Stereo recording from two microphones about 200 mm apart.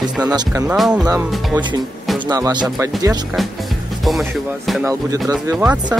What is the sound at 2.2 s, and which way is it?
Speech, 20° right (ahead or behind).